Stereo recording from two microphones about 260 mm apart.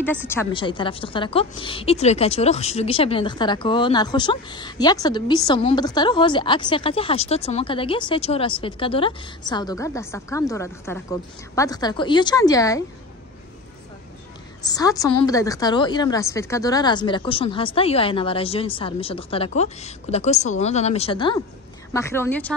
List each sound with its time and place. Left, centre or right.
0.3 s a woman's voice: centre
14.7 s a woman's voice: centre